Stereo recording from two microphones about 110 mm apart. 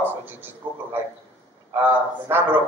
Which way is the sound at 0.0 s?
20° right (ahead or behind).